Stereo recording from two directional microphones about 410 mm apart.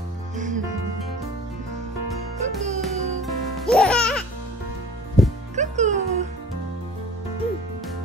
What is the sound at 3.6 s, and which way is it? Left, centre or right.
Music, centre.